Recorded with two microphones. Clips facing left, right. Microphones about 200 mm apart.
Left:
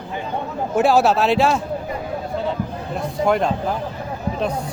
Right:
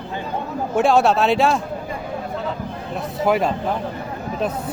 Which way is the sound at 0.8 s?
5° left (ahead or behind).